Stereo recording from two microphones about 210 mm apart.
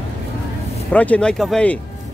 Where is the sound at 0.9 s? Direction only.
5° left (ahead or behind).